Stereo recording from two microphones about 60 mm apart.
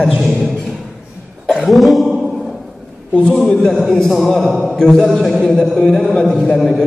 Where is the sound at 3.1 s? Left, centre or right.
Centre.